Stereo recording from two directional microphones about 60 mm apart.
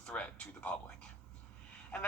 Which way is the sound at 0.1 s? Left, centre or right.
Left.